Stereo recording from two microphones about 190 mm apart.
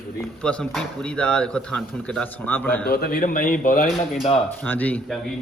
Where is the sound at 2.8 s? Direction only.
55° left (ahead or behind).